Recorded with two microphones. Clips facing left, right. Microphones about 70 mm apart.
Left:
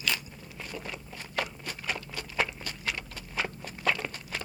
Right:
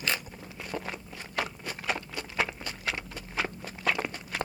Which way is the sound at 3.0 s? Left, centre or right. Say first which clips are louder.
Right 1 dB; centre.